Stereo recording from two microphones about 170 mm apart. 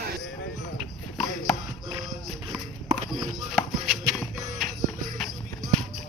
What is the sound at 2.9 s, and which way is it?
Music, centre (ahead or behind).